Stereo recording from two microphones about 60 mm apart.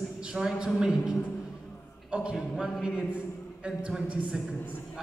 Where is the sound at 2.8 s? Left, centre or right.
Centre.